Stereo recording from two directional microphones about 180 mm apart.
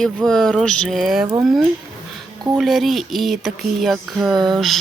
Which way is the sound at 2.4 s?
5° right (ahead or behind).